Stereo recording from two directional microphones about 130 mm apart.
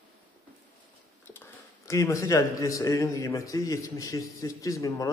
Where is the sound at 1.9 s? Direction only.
25° left (ahead or behind).